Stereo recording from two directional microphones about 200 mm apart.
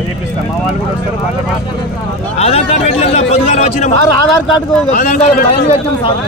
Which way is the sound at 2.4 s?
30° left (ahead or behind).